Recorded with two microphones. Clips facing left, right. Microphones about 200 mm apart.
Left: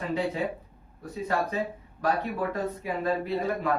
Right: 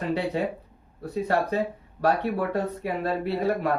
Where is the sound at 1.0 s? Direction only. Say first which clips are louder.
Right 4 dB; 65° right (ahead or behind).